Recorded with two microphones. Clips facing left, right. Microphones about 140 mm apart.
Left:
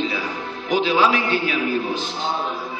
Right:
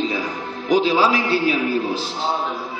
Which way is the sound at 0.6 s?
35° right (ahead or behind).